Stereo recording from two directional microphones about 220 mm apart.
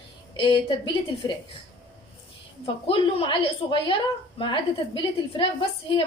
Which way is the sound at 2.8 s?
25° left (ahead or behind).